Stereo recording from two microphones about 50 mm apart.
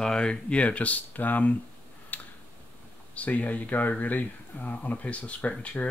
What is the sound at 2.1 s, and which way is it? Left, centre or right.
Tick-tock, left.